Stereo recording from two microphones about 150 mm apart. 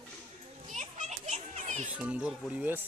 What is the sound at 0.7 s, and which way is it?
Children playing, 50° right (ahead or behind).